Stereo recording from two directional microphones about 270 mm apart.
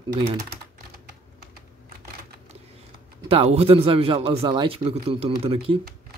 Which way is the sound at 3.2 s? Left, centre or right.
Right.